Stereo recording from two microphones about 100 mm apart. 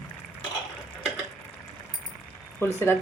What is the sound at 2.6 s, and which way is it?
Speech, 20° left (ahead or behind).